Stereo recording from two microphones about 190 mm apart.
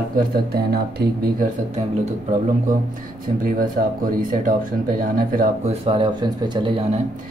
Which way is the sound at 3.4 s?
50° right (ahead or behind).